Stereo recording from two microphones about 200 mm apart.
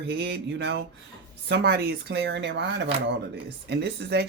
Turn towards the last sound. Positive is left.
turn(degrees=-55)  # may be behind; listen again after turning